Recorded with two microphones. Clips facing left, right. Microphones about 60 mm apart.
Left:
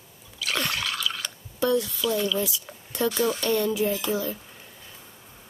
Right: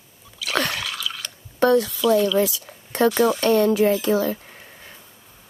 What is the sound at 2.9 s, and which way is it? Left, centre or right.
Speech, right.